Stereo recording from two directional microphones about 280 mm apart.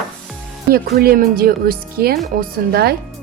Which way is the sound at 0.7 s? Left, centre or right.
Right.